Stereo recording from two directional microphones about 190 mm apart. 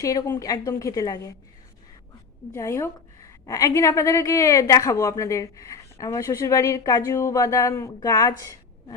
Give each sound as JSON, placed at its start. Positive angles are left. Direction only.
{"t": 0.0, "sound": "a woman's voice", "side_deg": 20}
{"t": 2.5, "sound": "a woman's voice", "side_deg": 15}